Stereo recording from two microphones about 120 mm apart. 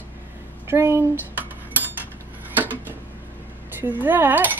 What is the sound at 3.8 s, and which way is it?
Speech, 15° right (ahead or behind).